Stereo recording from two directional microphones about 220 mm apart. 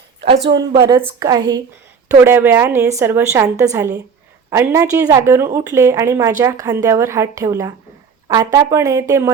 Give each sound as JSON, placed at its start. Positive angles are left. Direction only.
{"t": 0.7, "sound": "a woman's voice", "side_deg": -20}